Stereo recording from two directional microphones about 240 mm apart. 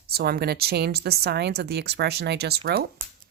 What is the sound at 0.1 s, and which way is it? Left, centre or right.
A woman's voice, right.